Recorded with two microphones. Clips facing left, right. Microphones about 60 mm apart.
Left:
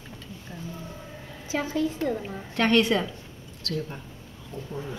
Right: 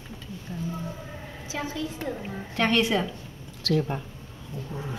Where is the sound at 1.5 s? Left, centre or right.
Left.